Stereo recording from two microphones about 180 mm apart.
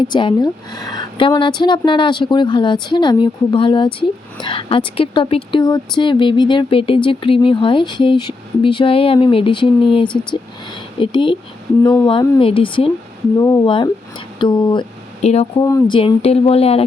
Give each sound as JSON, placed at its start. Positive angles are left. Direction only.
{"t": 0.0, "sound": "speech", "side_deg": 25}
{"t": 15.2, "sound": "speech", "side_deg": 35}
{"t": 15.6, "sound": "speech", "side_deg": 20}
{"t": 16.0, "sound": "speech", "side_deg": 30}